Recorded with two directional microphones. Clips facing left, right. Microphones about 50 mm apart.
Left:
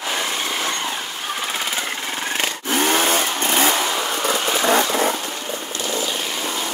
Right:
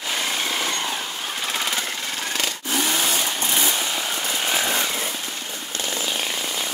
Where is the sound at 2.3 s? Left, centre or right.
Left.